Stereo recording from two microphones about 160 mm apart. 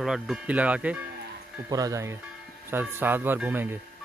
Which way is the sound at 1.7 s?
20° right (ahead or behind).